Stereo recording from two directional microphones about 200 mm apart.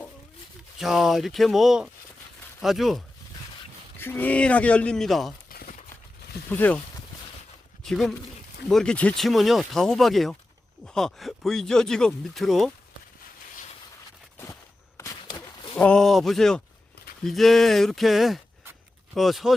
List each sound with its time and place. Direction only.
0.8 s speech: centre (ahead or behind)
3.9 s speech: 10° left (ahead or behind)
5.5 s crumpling: 45° left (ahead or behind)
6.5 s speech: 10° left (ahead or behind)
7.9 s speech: centre (ahead or behind)
14.9 s a sound: 15° left (ahead or behind)
15.8 s speech: 5° left (ahead or behind)